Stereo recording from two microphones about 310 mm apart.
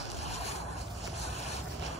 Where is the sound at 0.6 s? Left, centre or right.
Left.